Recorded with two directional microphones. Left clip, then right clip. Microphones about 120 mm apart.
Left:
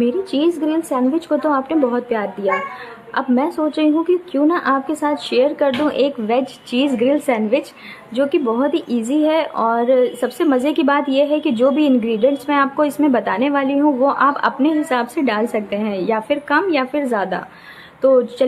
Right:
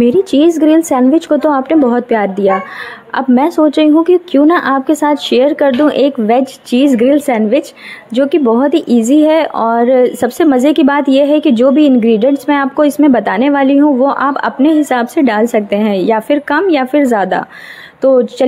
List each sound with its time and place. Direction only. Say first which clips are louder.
0.0 s speech: right 9 dB; 65° right (ahead or behind)
18.0 s speech: right 4 dB; 55° right (ahead or behind)